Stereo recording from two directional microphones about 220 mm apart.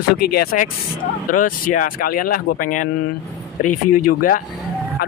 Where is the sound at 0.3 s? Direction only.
45° left (ahead or behind).